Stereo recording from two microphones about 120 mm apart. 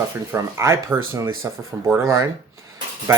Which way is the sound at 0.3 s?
25° right (ahead or behind).